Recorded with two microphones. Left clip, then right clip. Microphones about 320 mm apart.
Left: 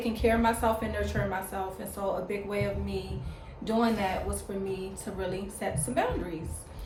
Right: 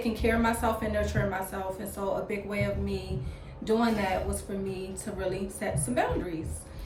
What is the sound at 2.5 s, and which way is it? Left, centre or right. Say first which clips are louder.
A woman's voice: right 1 dB; centre.